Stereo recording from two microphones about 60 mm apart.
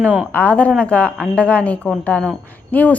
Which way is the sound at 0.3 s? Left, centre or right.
Left.